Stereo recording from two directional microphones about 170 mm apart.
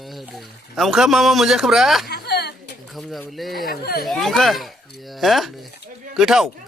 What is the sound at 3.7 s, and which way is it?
Speech, 60° left (ahead or behind).